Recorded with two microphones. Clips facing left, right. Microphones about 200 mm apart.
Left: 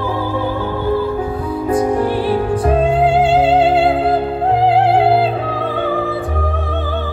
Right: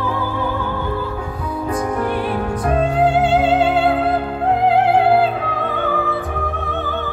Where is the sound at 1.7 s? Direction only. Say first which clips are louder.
Left 6 dB; 30° left (ahead or behind).